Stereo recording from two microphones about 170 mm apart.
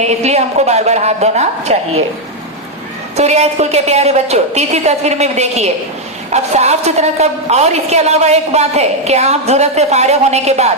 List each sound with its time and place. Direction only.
0.0 s a woman's voice: 40° right (ahead or behind)
3.2 s a woman's voice: 40° right (ahead or behind)